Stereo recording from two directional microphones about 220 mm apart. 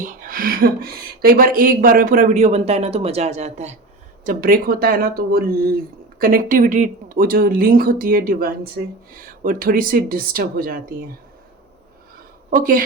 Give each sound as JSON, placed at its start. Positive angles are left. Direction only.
{"t": 0.0, "sound": "speech", "side_deg": -40}
{"t": 12.5, "sound": "speech", "side_deg": -40}